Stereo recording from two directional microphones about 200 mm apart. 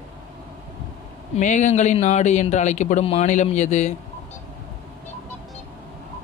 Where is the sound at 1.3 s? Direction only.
35° left (ahead or behind).